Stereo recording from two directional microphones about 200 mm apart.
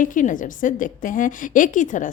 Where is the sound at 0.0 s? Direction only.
40° left (ahead or behind).